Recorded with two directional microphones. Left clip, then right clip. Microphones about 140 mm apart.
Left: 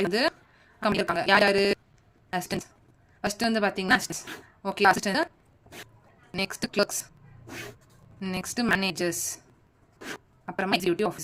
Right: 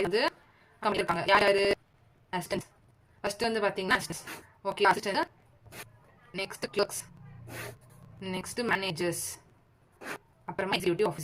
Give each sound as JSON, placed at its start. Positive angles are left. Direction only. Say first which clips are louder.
{"t": 0.0, "sound": "a woman's voice", "louder": "left 3 dB", "side_deg": 45}
{"t": 6.3, "sound": "a woman's voice", "louder": "left 4 dB", "side_deg": 50}
{"t": 8.2, "sound": "a woman's voice", "louder": "left 3 dB", "side_deg": 45}
{"t": 10.4, "sound": "a woman's voice", "louder": "left 4 dB", "side_deg": 45}